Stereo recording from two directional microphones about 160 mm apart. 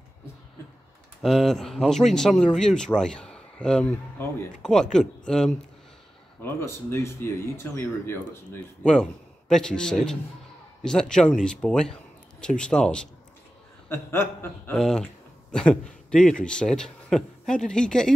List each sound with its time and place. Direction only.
1.2 s speech: centre (ahead or behind)
6.4 s speech: 15° left (ahead or behind)
8.8 s speech: 5° left (ahead or behind)
13.8 s speech: 15° left (ahead or behind)
14.7 s speech: 5° left (ahead or behind)